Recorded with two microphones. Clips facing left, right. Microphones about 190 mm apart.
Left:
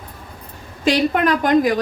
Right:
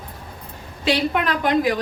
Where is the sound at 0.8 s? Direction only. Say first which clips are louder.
Left 4 dB; 45° left (ahead or behind).